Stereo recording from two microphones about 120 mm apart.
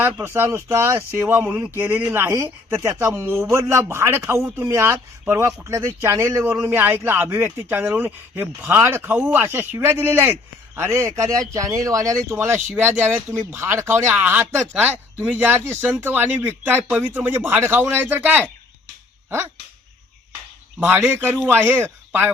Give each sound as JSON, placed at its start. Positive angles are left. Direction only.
{"t": 0.0, "sound": "speech", "side_deg": -20}
{"t": 20.7, "sound": "speech", "side_deg": -15}